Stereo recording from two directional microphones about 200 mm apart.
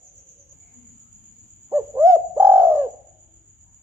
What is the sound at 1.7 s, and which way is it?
Bird, 15° right (ahead or behind).